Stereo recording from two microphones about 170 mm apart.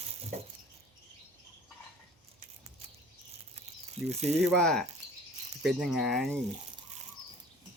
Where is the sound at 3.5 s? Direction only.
40° right (ahead or behind).